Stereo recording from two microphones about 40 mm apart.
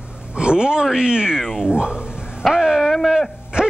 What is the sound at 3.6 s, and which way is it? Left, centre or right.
Dog, right.